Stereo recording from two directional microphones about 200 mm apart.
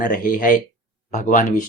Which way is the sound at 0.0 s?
45° left (ahead or behind).